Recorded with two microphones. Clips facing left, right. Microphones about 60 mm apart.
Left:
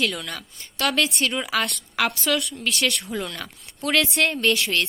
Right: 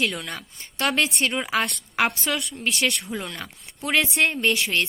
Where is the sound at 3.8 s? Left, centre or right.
Centre.